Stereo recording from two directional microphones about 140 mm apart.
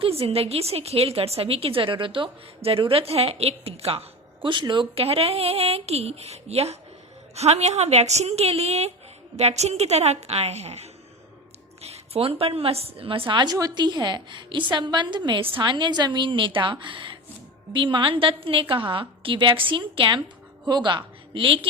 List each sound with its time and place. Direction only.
0.0 s a woman's voice: 45° right (ahead or behind)